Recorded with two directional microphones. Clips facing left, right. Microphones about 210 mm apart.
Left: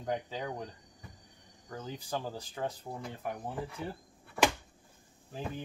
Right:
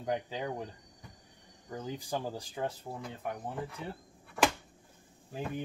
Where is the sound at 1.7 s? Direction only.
15° right (ahead or behind).